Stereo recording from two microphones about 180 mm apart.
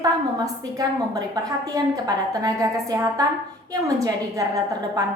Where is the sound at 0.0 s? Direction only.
20° right (ahead or behind).